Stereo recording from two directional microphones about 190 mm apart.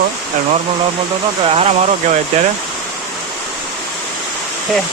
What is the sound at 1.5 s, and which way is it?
Speech, 30° right (ahead or behind).